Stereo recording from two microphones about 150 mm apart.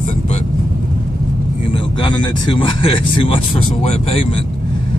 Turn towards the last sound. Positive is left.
turn(degrees=45)  # may be behind; listen again after turning